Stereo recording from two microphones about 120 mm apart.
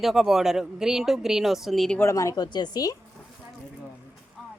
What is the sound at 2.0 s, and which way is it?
Speech, 25° left (ahead or behind).